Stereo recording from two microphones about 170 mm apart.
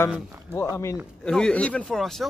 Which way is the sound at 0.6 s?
15° left (ahead or behind).